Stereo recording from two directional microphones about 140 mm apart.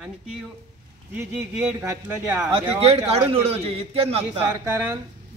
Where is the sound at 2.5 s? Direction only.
45° right (ahead or behind).